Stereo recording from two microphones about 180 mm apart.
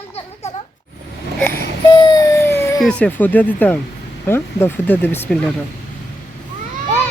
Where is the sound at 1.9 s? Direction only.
20° left (ahead or behind).